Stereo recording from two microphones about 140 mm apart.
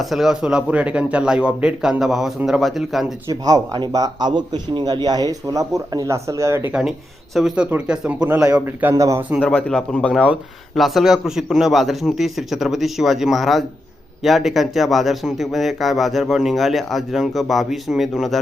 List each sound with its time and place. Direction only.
0.0 s speech: centre (ahead or behind)
3.2 s a man's voice: 25° right (ahead or behind)
7.3 s speech: 5° right (ahead or behind)
8.3 s a man's voice: 20° right (ahead or behind)
9.4 s speech: 10° left (ahead or behind)